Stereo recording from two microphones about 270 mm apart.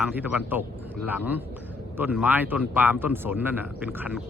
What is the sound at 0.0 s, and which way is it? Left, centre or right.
A man's voice, centre.